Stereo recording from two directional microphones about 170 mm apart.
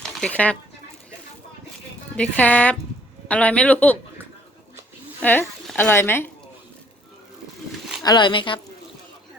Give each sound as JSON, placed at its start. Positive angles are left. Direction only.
{"t": 0.0, "sound": "a sound", "side_deg": 5}
{"t": 2.1, "sound": "a man's voice", "side_deg": 5}
{"t": 5.2, "sound": "speech", "side_deg": 10}
{"t": 8.0, "sound": "speech", "side_deg": 25}